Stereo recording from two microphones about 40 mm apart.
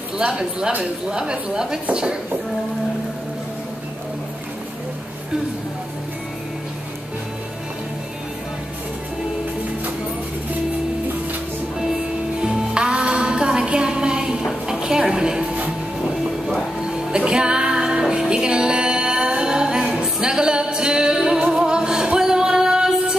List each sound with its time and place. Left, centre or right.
0.2 s a woman's voice: centre
12.4 s music: right
16.8 s music: right